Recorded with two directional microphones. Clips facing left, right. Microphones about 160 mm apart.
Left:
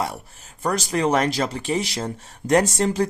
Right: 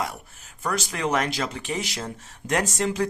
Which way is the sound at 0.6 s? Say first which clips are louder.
Left 5 dB; 35° left (ahead or behind).